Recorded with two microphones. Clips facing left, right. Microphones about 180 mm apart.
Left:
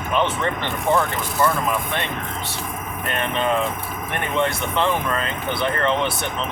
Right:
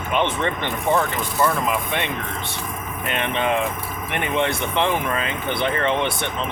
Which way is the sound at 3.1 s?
20° right (ahead or behind).